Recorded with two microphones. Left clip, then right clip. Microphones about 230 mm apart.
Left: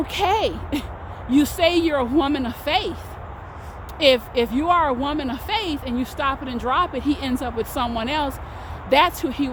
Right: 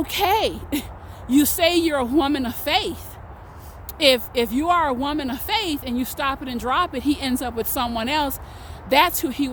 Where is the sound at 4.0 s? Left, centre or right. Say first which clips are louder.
Left 1 dB; right.